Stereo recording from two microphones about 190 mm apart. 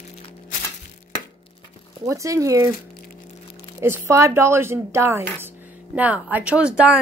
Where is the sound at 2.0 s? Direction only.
15° right (ahead or behind).